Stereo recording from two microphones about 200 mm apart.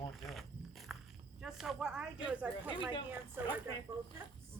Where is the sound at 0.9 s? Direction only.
Centre (ahead or behind).